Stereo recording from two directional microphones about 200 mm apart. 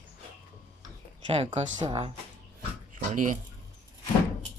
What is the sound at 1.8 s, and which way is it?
Speech, 25° right (ahead or behind).